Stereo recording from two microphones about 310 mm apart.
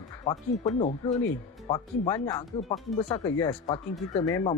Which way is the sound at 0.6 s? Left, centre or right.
Centre.